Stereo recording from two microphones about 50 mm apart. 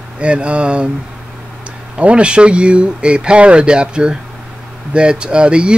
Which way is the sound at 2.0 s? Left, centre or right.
Right.